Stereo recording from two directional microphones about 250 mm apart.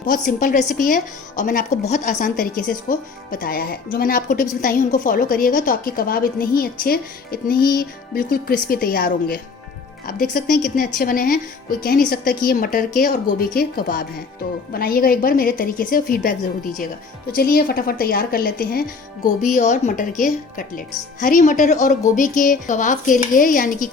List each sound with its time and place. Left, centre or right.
0.0 s a woman's voice: left
17.3 s a woman's voice: left